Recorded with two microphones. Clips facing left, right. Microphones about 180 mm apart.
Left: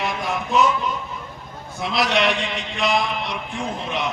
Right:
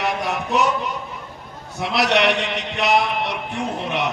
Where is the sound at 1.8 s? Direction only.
70° right (ahead or behind).